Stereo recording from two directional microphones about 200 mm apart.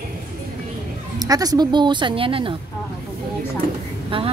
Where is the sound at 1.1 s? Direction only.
20° right (ahead or behind).